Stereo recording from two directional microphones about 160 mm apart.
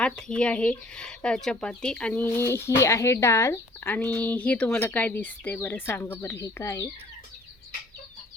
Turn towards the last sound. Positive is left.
turn(degrees=20)  # may be behind; listen again after turning